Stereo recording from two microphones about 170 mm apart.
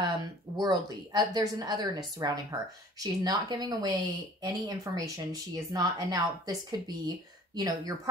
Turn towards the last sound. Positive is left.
turn(degrees=-20)  # may be behind; listen again after turning